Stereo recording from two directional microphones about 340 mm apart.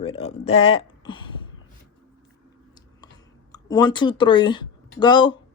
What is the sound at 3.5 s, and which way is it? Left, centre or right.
A woman's voice, centre.